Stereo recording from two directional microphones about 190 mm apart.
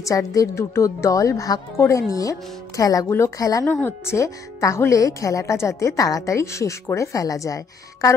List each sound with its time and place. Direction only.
0.0 s a woman's voice: 15° left (ahead or behind)